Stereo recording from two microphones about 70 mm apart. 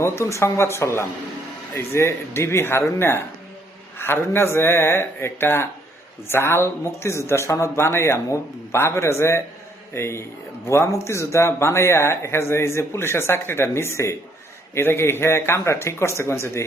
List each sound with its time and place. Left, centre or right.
0.0 s speech: left